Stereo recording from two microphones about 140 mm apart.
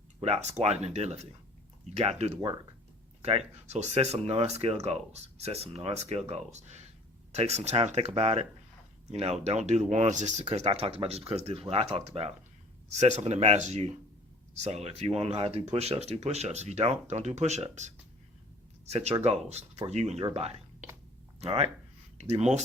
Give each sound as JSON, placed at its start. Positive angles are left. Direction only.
{"t": 0.2, "sound": "speech", "side_deg": -50}